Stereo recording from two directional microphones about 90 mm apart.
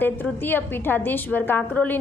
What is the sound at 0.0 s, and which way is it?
A woman's voice, 20° left (ahead or behind).